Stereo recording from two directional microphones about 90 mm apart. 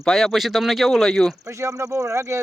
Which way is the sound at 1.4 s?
30° right (ahead or behind).